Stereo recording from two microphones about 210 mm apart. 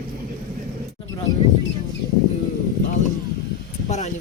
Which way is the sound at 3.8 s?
35° left (ahead or behind).